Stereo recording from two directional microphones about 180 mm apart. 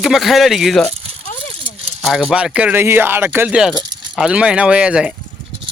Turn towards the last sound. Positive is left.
turn(degrees=-5)  # may be behind; listen again after turning